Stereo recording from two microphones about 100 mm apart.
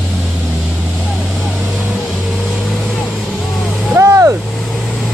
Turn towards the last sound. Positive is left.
turn(degrees=-30)  # may be behind; listen again after turning